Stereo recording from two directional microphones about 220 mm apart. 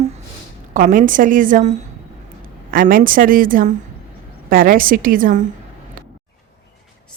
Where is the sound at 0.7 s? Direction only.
40° right (ahead or behind).